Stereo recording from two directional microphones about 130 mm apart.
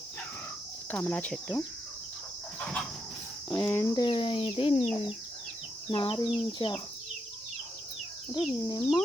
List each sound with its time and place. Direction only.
0.9 s speech: 10° left (ahead or behind)
2.6 s cricket: 5° left (ahead or behind)
3.7 s speech: 20° left (ahead or behind)
3.9 s speech: 40° left (ahead or behind)
5.9 s speech: 35° left (ahead or behind)
8.3 s speech: 35° left (ahead or behind)